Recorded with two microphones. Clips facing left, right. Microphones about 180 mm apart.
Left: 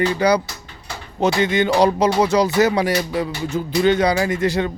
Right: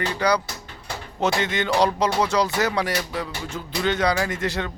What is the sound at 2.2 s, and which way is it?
Music, 20° left (ahead or behind).